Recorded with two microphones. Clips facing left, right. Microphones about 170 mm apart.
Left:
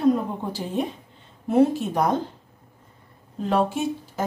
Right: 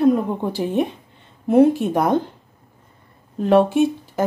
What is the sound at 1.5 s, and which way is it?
Speech, 55° right (ahead or behind).